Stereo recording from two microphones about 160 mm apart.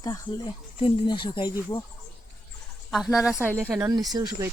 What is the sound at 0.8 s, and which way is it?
Speech, 35° left (ahead or behind).